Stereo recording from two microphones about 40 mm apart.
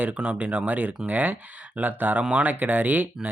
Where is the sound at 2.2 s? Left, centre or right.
Right.